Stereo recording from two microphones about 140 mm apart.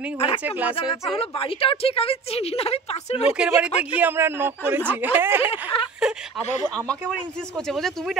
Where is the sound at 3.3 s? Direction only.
5° right (ahead or behind).